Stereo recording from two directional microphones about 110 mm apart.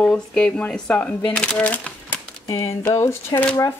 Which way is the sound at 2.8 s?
25° left (ahead or behind).